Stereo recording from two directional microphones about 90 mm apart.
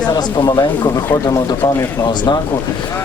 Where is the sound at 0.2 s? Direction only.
50° left (ahead or behind).